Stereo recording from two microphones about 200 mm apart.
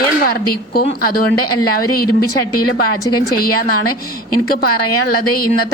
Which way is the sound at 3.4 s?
50° left (ahead or behind).